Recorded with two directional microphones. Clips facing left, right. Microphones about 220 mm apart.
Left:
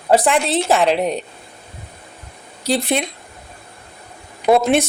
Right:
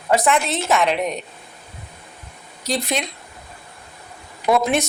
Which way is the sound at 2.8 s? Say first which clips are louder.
Left 4 dB; 55° left (ahead or behind).